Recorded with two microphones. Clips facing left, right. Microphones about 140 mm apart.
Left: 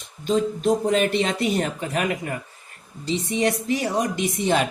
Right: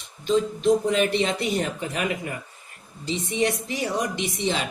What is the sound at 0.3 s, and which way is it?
Speech, 45° left (ahead or behind).